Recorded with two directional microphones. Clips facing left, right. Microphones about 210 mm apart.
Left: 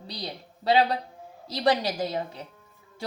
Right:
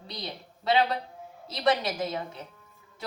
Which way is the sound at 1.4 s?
35° left (ahead or behind).